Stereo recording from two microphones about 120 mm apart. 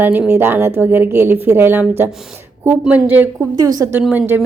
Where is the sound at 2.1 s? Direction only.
5° right (ahead or behind).